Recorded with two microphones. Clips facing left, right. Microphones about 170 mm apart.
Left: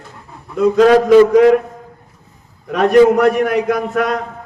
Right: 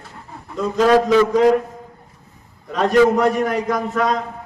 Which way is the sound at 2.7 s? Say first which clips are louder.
Left 5 dB; 65° left (ahead or behind).